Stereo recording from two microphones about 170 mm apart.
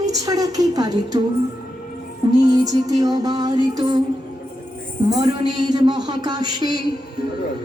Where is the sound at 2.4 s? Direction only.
20° right (ahead or behind).